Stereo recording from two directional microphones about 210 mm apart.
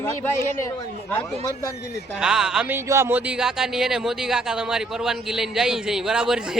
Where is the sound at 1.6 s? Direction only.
15° left (ahead or behind).